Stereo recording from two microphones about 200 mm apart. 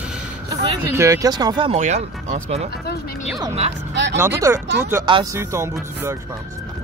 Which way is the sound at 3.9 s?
60° right (ahead or behind).